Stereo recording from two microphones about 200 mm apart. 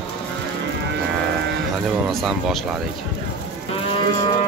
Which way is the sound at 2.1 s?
Centre (ahead or behind).